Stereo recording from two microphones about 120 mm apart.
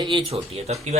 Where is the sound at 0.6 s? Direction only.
60° right (ahead or behind).